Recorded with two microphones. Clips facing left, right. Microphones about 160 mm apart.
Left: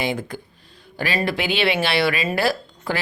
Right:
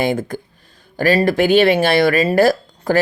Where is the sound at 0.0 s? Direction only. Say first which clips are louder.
Right 6 dB; 45° right (ahead or behind).